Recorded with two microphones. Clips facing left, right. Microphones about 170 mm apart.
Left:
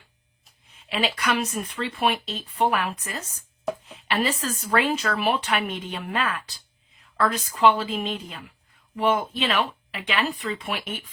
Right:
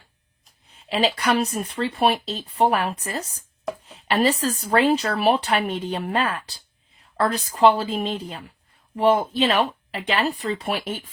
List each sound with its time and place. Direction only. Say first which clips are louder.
0.9 s speech: right 4 dB; 35° right (ahead or behind)